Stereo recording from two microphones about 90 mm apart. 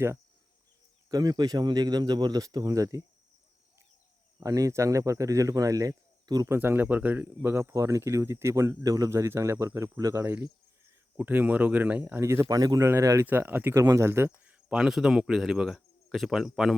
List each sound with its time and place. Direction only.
1.1 s speech: 45° right (ahead or behind)
4.4 s speech: 40° right (ahead or behind)
6.5 s speech: 25° right (ahead or behind)
8.8 s speech: 40° right (ahead or behind)
10.2 s speech: 25° right (ahead or behind)
12.2 s speech: 30° right (ahead or behind)
12.5 s speech: 45° right (ahead or behind)
12.8 s speech: 35° right (ahead or behind)
13.2 s speech: 20° right (ahead or behind)
13.8 s speech: 35° right (ahead or behind)
14.7 s speech: 5° right (ahead or behind)